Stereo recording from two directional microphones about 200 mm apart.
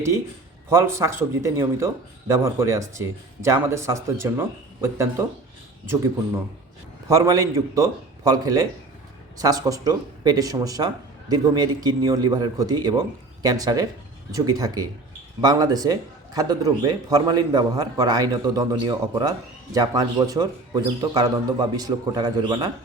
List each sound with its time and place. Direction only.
0.7 s a man's voice: 15° right (ahead or behind)
7.1 s a man's voice: 15° right (ahead or behind)